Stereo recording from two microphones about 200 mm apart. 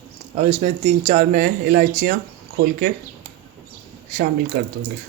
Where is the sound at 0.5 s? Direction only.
30° right (ahead or behind).